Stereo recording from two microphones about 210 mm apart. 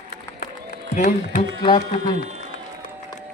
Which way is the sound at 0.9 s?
40° left (ahead or behind).